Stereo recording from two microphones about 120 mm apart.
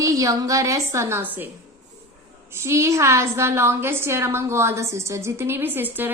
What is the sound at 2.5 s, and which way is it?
A woman's voice, 20° right (ahead or behind).